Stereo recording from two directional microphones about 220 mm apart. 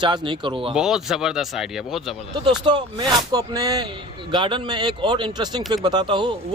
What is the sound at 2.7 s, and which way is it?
A man's voice, 20° right (ahead or behind).